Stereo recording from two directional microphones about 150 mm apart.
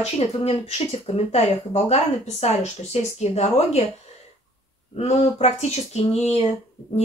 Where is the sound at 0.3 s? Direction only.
45° left (ahead or behind).